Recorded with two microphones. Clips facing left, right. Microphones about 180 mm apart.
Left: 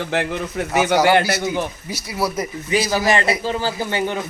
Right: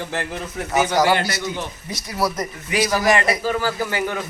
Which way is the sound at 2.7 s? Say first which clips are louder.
Even; 30° left (ahead or behind).